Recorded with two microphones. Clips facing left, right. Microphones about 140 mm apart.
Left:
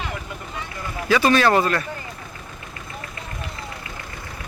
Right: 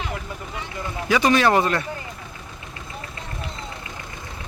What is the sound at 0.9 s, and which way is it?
Speech, 20° right (ahead or behind).